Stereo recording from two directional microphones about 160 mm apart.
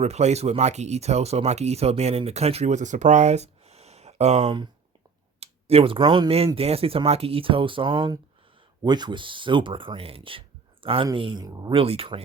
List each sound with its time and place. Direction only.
0.0 s speech: 45° right (ahead or behind); by 11.7 s 20° right (ahead or behind)
11.7 s speech: 35° right (ahead or behind)